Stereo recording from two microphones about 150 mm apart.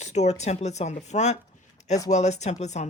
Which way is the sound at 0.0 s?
50° left (ahead or behind).